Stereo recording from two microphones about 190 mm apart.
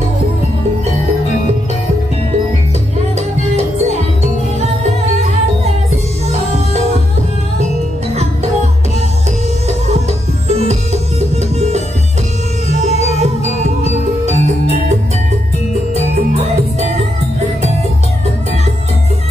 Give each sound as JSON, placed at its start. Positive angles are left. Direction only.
{"t": 10.6, "sound": "music", "side_deg": -35}
{"t": 13.2, "sound": "music", "side_deg": -35}